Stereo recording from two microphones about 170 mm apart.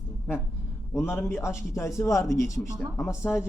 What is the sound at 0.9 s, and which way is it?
Speech, 15° left (ahead or behind).